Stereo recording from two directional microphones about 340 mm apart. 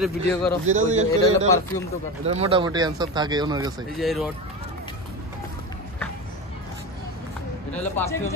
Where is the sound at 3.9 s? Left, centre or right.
Centre.